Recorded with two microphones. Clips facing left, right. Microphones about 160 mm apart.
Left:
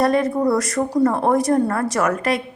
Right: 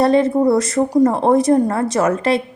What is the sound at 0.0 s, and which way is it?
A woman's voice, 25° right (ahead or behind).